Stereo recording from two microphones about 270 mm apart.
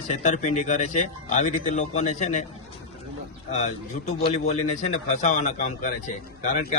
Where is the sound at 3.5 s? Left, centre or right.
Left.